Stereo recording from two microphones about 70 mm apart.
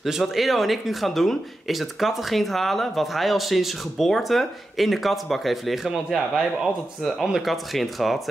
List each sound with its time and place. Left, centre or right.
0.0 s speech: centre